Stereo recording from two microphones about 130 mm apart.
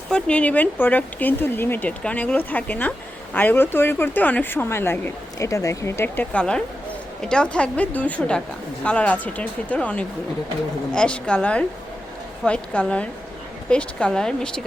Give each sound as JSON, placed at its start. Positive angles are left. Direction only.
{"t": 0.1, "sound": "speech", "side_deg": 10}
{"t": 6.3, "sound": "speech", "side_deg": 5}